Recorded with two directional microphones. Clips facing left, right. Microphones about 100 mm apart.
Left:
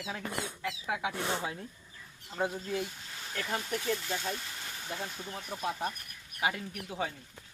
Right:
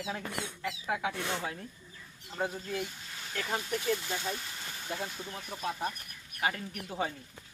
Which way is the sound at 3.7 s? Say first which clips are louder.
Right 2 dB; centre (ahead or behind).